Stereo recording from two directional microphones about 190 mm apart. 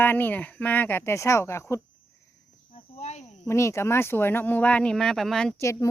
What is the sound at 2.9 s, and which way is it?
Cricket, 35° left (ahead or behind).